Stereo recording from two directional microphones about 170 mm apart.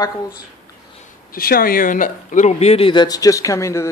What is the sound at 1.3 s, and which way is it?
Speech, 60° left (ahead or behind).